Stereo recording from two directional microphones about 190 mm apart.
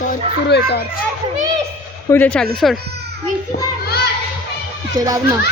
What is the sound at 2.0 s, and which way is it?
Speech, 10° left (ahead or behind).